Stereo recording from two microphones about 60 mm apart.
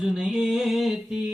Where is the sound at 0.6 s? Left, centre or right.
Centre.